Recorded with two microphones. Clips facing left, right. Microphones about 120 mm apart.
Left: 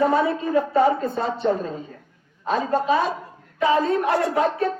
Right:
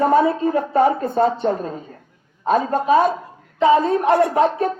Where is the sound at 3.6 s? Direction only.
20° right (ahead or behind).